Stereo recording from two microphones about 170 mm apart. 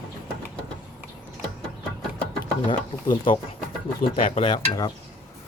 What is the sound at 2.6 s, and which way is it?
Speech, 30° left (ahead or behind).